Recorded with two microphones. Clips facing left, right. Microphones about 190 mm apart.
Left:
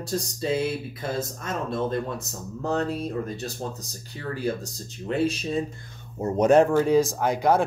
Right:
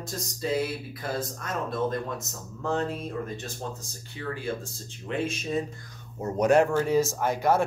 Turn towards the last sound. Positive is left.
turn(degrees=15)  # may be behind; listen again after turning